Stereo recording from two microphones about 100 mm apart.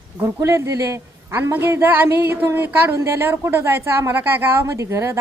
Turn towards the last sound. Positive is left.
turn(degrees=-30)  # may be behind; listen again after turning